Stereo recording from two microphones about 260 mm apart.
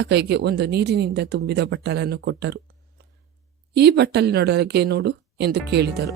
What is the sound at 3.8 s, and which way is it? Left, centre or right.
Speech, right.